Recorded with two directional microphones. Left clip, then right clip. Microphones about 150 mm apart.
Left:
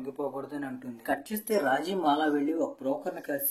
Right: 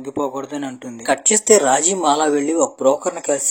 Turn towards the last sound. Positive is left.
turn(degrees=-50)  # may be behind; listen again after turning